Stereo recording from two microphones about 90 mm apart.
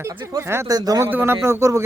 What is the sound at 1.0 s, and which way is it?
Speech, 25° right (ahead or behind).